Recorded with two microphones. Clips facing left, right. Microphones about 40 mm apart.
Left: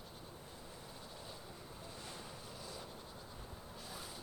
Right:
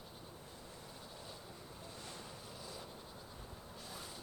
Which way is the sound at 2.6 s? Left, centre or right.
Centre.